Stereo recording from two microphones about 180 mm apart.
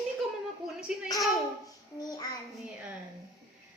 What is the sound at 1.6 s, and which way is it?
Child singing, 20° left (ahead or behind).